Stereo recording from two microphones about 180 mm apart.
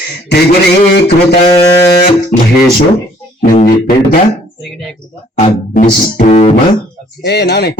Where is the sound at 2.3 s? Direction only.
50° left (ahead or behind).